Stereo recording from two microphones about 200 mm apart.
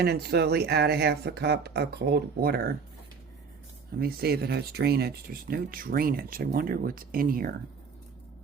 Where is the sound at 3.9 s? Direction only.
50° right (ahead or behind).